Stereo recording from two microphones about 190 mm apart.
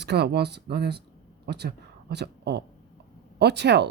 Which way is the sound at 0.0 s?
60° right (ahead or behind).